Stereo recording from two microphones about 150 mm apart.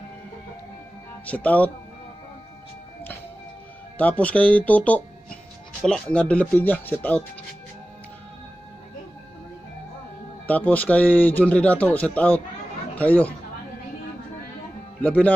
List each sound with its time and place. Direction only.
1.2 s speech: 10° left (ahead or behind)
4.0 s speech: 10° left (ahead or behind)
10.4 s speech: 10° left (ahead or behind)
15.0 s speech: 10° left (ahead or behind)